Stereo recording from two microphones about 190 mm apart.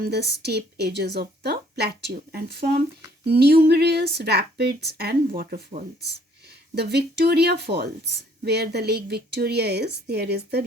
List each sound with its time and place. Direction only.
0.0 s a woman's voice: 60° right (ahead or behind)